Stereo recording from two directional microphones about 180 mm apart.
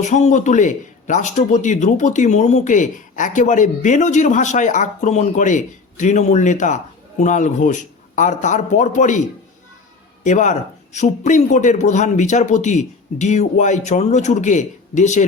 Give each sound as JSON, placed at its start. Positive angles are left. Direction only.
{"t": 0.0, "sound": "speech", "side_deg": 40}
{"t": 10.2, "sound": "a man's voice", "side_deg": 40}